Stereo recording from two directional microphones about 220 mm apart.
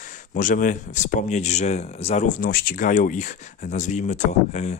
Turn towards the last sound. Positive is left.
turn(degrees=30)  # may be behind; listen again after turning